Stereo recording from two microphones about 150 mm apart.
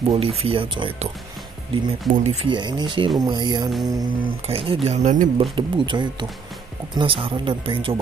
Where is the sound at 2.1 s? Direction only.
50° right (ahead or behind).